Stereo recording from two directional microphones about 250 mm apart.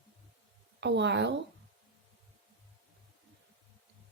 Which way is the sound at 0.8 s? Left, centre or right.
Right.